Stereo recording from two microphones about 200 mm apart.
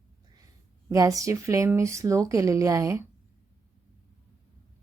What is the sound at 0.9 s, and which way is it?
A woman's voice, 15° right (ahead or behind).